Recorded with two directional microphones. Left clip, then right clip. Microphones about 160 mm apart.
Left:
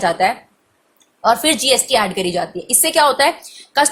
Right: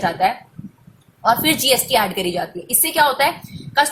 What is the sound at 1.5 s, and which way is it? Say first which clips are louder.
A woman's voice: left 1 dB; 15° left (ahead or behind).